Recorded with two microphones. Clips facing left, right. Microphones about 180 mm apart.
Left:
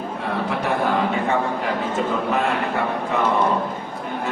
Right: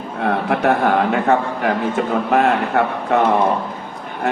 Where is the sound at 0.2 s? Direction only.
65° right (ahead or behind).